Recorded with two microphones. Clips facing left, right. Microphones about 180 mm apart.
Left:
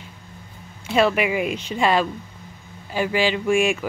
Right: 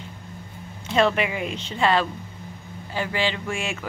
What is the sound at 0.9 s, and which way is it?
Speech, 10° left (ahead or behind).